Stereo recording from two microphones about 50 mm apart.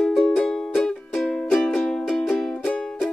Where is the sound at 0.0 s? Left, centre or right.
Centre.